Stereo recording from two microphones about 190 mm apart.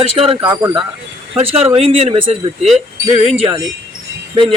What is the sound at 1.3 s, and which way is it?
Speech, 30° right (ahead or behind).